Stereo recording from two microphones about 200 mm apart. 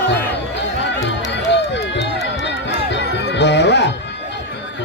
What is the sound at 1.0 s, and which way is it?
Run, 60° left (ahead or behind).